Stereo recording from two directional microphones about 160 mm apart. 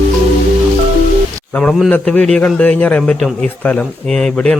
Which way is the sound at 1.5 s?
5° left (ahead or behind).